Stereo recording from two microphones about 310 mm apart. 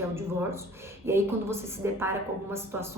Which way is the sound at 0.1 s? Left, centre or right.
Centre.